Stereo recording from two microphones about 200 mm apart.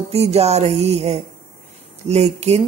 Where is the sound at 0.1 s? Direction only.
30° right (ahead or behind).